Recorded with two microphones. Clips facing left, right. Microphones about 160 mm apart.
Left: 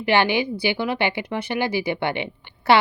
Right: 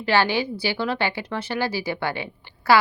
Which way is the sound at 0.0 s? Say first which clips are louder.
Left 2 dB; 15° left (ahead or behind).